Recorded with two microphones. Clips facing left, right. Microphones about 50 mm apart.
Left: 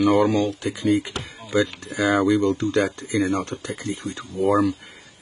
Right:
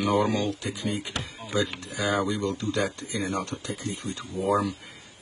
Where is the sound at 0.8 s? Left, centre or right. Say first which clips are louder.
Left 12 dB; left.